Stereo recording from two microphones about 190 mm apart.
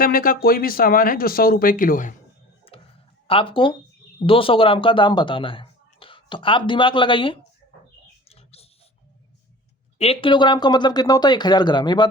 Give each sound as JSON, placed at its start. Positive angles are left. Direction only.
{"t": 0.0, "sound": "speech", "side_deg": 50}
{"t": 2.7, "sound": "a sound", "side_deg": 30}
{"t": 3.2, "sound": "speech", "side_deg": 30}
{"t": 8.3, "sound": "pig", "side_deg": 30}
{"t": 10.0, "sound": "speech", "side_deg": 30}